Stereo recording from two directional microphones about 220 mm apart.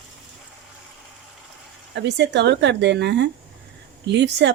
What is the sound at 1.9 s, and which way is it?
Speech, 50° right (ahead or behind).